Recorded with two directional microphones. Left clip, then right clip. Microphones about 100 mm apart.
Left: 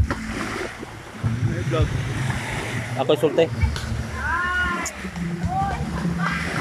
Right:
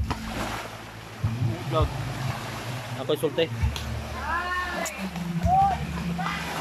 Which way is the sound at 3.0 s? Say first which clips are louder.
Left 7 dB; 15° right (ahead or behind).